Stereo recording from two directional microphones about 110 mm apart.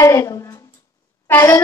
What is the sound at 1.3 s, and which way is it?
Speech, 20° left (ahead or behind).